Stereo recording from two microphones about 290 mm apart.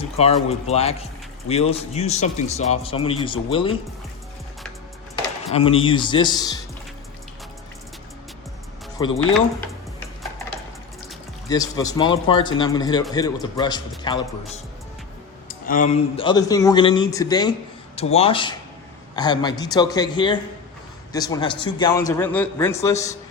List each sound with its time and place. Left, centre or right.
0.2 s a man's voice: left
5.5 s a man's voice: centre
11.4 s a man's voice: centre
15.4 s a man's voice: left; by 23.0 s centre